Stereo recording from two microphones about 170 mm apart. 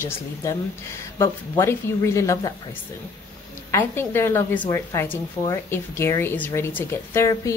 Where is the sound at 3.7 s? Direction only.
15° left (ahead or behind).